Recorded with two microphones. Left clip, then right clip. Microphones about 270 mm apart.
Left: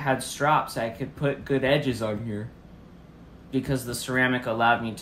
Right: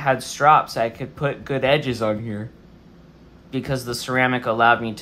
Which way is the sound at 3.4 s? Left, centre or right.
Right.